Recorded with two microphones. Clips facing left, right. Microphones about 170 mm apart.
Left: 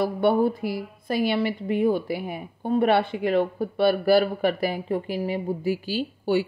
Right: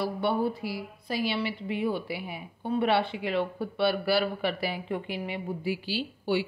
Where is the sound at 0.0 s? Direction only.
50° left (ahead or behind).